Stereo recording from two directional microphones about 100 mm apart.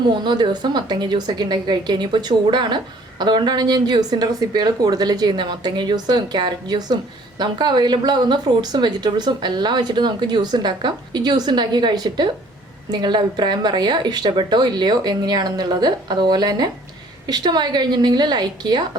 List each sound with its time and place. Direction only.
0.1 s a woman's voice: 45° right (ahead or behind)